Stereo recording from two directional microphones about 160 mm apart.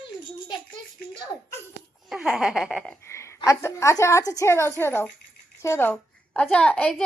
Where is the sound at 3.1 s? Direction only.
15° left (ahead or behind).